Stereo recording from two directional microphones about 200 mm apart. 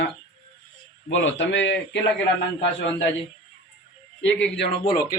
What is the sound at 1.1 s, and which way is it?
Speech, 65° left (ahead or behind).